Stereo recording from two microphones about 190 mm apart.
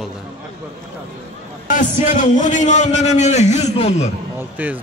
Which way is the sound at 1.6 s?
40° left (ahead or behind).